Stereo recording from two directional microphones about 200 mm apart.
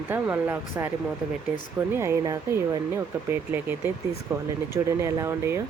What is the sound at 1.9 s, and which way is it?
Speech, 15° right (ahead or behind).